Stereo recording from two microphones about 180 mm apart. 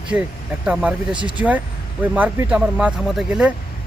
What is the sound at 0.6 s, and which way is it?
Speech, 5° right (ahead or behind).